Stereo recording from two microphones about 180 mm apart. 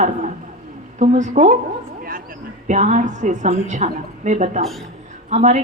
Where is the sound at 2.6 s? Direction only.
40° right (ahead or behind).